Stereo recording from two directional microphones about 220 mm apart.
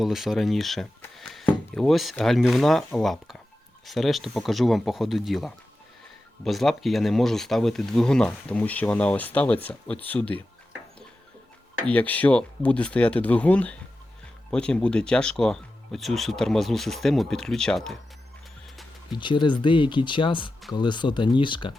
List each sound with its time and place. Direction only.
0.0 s speech: centre (ahead or behind)
11.9 s speech: 5° left (ahead or behind)
19.1 s speech: 20° left (ahead or behind)